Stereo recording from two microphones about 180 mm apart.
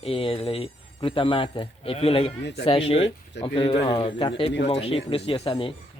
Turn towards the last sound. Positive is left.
turn(degrees=30)  # may be behind; listen again after turning